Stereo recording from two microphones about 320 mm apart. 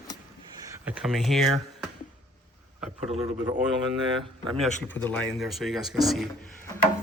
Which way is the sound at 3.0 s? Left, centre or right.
Centre.